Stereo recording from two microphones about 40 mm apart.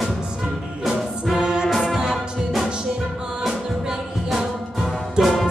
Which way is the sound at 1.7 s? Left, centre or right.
Centre.